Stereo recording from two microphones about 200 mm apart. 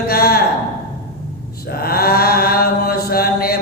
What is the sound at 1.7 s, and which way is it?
Mantra, 50° left (ahead or behind).